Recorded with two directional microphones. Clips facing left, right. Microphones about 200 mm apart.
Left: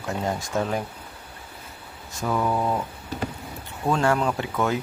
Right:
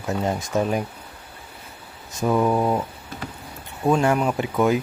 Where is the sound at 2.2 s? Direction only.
15° right (ahead or behind).